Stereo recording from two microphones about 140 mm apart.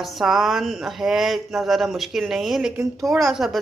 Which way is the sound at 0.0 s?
Centre (ahead or behind).